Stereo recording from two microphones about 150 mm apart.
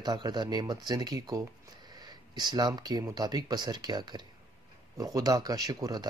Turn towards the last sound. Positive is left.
turn(degrees=-25)  # may be behind; listen again after turning